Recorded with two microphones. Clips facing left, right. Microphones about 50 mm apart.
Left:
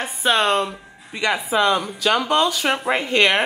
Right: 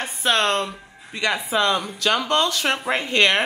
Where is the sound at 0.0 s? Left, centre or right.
Centre.